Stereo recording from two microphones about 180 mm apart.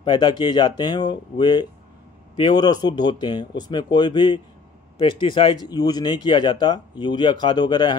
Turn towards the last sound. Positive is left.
turn(degrees=25)  # may be behind; listen again after turning